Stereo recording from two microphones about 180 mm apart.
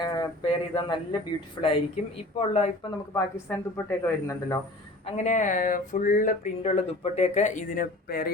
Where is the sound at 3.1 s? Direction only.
15° left (ahead or behind).